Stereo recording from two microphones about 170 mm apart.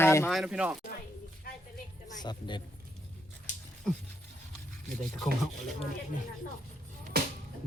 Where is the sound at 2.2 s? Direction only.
25° left (ahead or behind).